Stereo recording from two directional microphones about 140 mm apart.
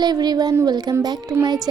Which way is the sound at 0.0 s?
30° right (ahead or behind).